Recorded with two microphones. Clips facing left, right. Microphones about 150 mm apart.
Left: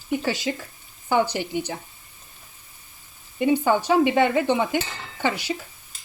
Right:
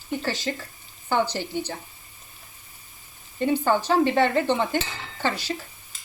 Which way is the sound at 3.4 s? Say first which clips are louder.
Left 2 dB; 15° left (ahead or behind).